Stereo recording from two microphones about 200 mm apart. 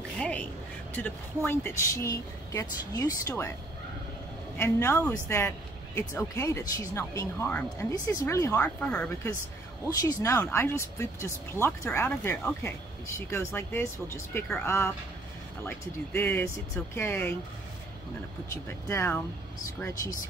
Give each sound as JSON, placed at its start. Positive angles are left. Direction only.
{"t": 0.2, "sound": "a sound", "side_deg": 5}
{"t": 0.9, "sound": "speech", "side_deg": 10}
{"t": 4.6, "sound": "speech", "side_deg": 10}
{"t": 18.5, "sound": "speech", "side_deg": 15}